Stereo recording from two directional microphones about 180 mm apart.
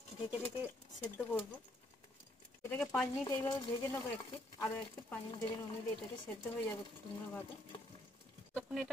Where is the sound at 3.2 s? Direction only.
20° left (ahead or behind).